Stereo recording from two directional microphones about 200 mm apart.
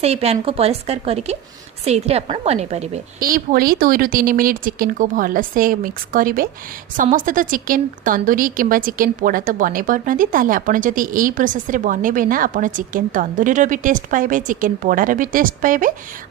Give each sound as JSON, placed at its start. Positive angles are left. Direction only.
{"t": 0.0, "sound": "a woman's voice", "side_deg": -30}
{"t": 3.2, "sound": "a woman's voice", "side_deg": -45}